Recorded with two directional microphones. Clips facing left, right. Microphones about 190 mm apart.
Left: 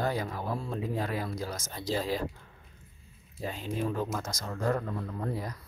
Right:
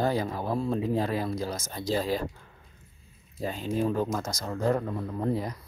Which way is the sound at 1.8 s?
45° right (ahead or behind).